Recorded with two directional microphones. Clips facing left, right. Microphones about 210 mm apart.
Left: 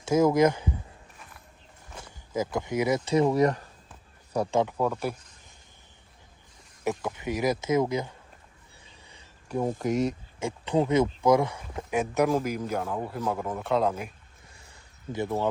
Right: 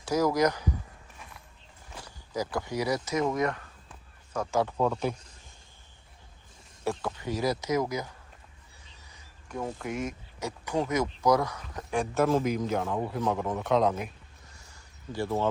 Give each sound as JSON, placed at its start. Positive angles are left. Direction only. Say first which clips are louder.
{"t": 0.0, "sound": "speech", "louder": "left 4 dB", "side_deg": 25}
{"t": 2.0, "sound": "speech", "louder": "left 3 dB", "side_deg": 25}
{"t": 4.6, "sound": "a man's voice", "louder": "even", "side_deg": 10}
{"t": 6.8, "sound": "speech", "louder": "left 2 dB", "side_deg": 20}
{"t": 9.0, "sound": "a sound", "louder": "left 6 dB", "side_deg": 30}
{"t": 9.8, "sound": "speech", "louder": "left 7 dB", "side_deg": 35}
{"t": 12.3, "sound": "a man's voice", "louder": "right 1 dB", "side_deg": 10}
{"t": 15.1, "sound": "a man's voice", "louder": "left 1 dB", "side_deg": 15}